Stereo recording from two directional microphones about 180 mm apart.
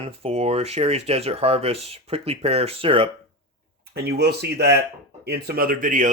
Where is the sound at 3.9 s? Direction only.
65° right (ahead or behind).